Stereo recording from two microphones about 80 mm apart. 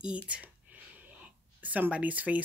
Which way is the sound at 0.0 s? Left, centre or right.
Centre.